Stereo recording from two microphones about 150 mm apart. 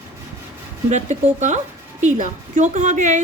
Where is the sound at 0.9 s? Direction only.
50° right (ahead or behind).